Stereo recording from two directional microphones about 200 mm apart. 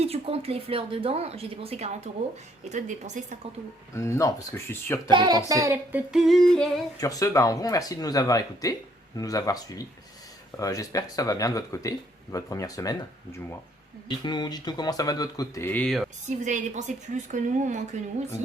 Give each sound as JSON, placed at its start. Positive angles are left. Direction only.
{"t": 0.0, "sound": "a woman's voice", "side_deg": -30}
{"t": 3.9, "sound": "speech", "side_deg": 15}
{"t": 5.1, "sound": "speech", "side_deg": -20}
{"t": 5.5, "sound": "humming", "side_deg": -15}
{"t": 7.0, "sound": "speech", "side_deg": 15}
{"t": 14.1, "sound": "speech", "side_deg": 20}
{"t": 16.4, "sound": "a woman's voice", "side_deg": -40}